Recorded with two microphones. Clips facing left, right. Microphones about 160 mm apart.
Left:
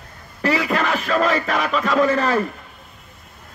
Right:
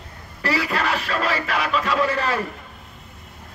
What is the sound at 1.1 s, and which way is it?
Speech, 40° left (ahead or behind).